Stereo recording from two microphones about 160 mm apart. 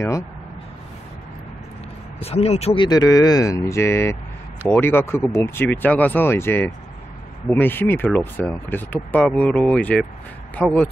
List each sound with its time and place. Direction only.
2.1 s speech: 40° left (ahead or behind); by 10.9 s 5° left (ahead or behind)